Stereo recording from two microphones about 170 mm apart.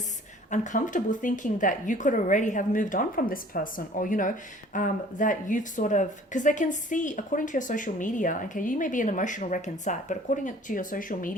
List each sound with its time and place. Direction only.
0.5 s speech: 50° left (ahead or behind)